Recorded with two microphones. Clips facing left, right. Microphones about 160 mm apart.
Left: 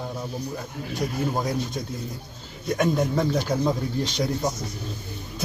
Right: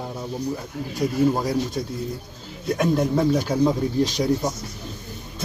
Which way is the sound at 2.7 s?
5° right (ahead or behind).